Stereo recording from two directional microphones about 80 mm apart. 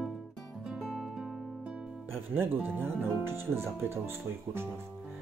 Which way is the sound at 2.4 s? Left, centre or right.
Right.